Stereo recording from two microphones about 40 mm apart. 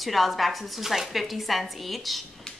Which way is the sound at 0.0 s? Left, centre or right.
Centre.